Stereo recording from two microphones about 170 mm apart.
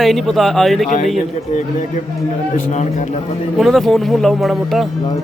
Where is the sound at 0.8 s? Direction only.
45° left (ahead or behind).